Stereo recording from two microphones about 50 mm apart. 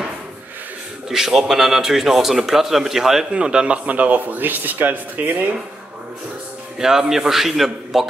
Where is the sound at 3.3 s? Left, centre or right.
Centre; by 5.4 s right.